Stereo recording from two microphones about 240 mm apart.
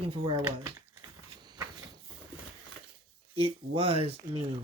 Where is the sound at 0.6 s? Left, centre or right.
Centre.